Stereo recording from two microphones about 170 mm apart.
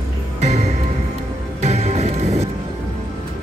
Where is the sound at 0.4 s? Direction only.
40° right (ahead or behind).